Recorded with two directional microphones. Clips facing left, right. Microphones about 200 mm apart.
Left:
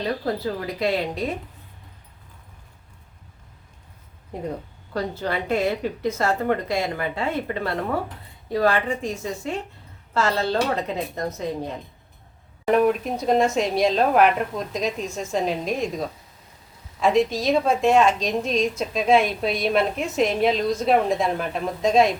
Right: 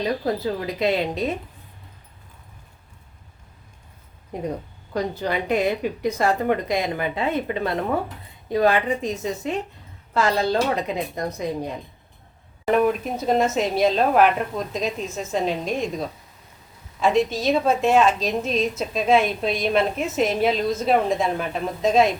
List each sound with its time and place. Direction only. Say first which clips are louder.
0.0 s speech: right 2 dB; 20° right (ahead or behind)
4.9 s speech: right 2 dB; 15° right (ahead or behind)
12.6 s a woman's voice: left 1 dB; centre (ahead or behind)